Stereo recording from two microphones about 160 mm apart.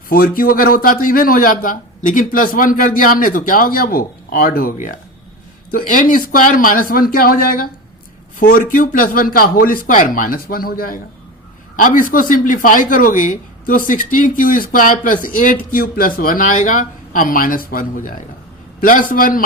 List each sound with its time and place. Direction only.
0.1 s a man's voice: 65° left (ahead or behind)